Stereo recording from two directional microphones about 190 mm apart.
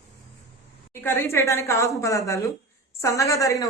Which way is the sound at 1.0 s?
10° left (ahead or behind).